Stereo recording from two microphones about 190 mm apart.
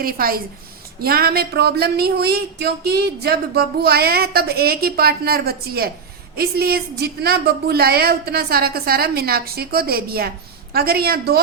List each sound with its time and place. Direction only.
0.0 s a woman's voice: 50° right (ahead or behind)